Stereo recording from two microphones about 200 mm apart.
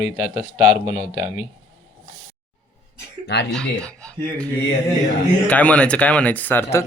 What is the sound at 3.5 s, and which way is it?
Speech, 5° left (ahead or behind).